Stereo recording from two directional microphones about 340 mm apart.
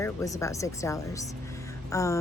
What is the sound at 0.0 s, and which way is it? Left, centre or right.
Speech, centre.